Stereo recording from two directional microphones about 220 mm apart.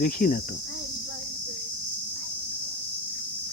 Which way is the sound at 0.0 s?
40° left (ahead or behind).